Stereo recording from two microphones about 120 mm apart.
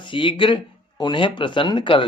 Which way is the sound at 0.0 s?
45° left (ahead or behind).